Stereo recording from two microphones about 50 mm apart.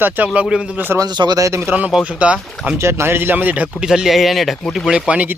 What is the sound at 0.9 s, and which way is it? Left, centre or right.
Speech, right.